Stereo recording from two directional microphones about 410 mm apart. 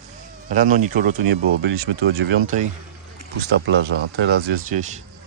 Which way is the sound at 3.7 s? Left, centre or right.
Right.